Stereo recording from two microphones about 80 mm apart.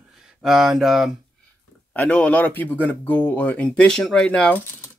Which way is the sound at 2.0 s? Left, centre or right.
Centre.